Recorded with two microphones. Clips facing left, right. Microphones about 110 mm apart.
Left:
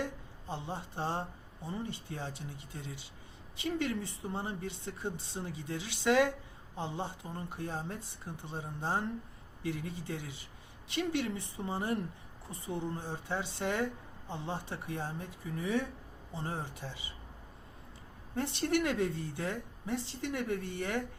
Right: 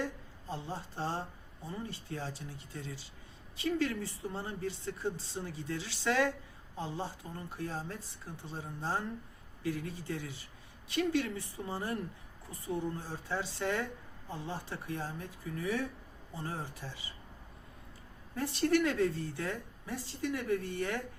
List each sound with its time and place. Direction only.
0.0 s a sound: 20° left (ahead or behind)
1.6 s speech: 20° left (ahead or behind)
18.3 s speech: 25° left (ahead or behind)